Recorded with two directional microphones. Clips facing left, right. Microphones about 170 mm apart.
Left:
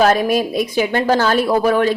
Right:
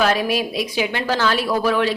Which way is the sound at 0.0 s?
45° left (ahead or behind).